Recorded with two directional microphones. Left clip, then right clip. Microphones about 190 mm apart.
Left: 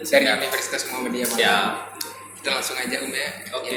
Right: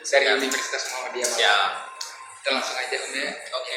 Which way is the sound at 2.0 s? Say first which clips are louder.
Left 1 dB; 40° left (ahead or behind).